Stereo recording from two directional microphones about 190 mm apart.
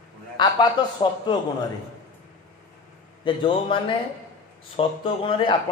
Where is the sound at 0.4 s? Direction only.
25° left (ahead or behind).